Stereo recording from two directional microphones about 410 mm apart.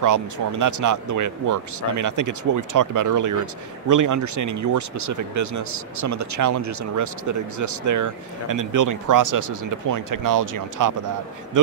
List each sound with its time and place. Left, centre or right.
0.0 s speech: right